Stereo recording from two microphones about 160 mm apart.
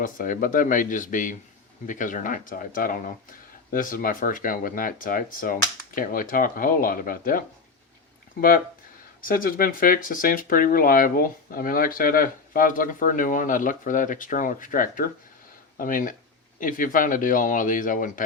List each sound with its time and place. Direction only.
0.0 s speech: 60° left (ahead or behind)